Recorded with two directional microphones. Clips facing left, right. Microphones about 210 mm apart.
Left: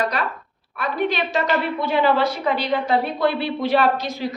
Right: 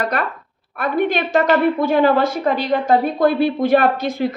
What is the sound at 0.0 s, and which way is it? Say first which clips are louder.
A woman's voice: right 2 dB; 55° right (ahead or behind).